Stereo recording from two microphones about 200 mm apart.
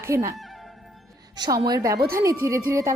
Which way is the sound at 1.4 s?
20° right (ahead or behind).